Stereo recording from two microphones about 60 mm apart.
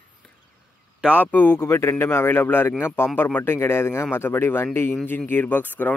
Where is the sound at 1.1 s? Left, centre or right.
Left.